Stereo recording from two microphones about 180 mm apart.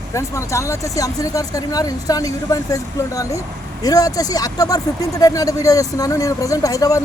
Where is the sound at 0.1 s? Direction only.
15° left (ahead or behind).